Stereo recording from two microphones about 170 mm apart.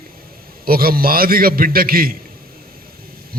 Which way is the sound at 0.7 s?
60° right (ahead or behind).